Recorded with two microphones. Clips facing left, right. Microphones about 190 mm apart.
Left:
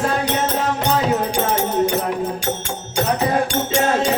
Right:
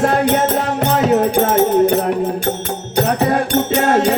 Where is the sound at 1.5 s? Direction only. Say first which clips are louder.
Right 7 dB; 55° right (ahead or behind).